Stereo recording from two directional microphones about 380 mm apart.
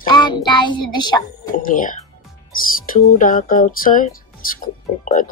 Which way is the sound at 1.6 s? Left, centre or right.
Left.